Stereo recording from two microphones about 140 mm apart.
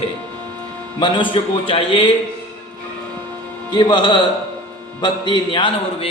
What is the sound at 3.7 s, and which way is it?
A man's voice, 35° left (ahead or behind).